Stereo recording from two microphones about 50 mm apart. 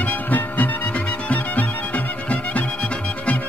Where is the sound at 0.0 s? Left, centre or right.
Left.